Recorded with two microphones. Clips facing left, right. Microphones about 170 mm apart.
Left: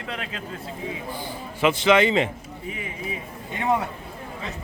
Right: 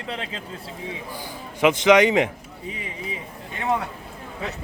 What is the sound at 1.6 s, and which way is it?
Speech, 20° right (ahead or behind).